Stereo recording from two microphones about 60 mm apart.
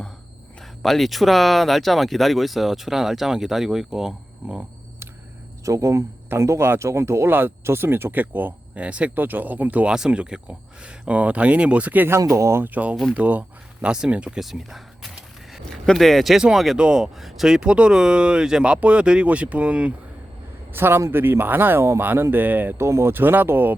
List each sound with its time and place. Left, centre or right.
0.8 s speech: centre
5.6 s speech: right
8.1 s speech: right
9.1 s speech: right
9.9 s speech: centre
12.3 s speech: right
12.6 s speech: right
14.3 s speech: centre; by 19.9 s right
20.7 s speech: right
22.8 s speech: right
23.1 s speech: right